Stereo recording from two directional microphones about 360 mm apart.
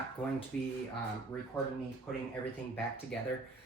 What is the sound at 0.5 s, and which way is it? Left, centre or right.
Speech, centre.